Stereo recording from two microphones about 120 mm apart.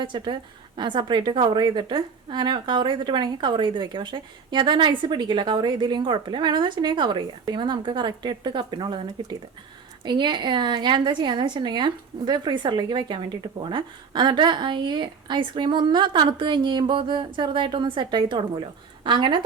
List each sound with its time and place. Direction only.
0.0 s a woman's voice: 40° right (ahead or behind)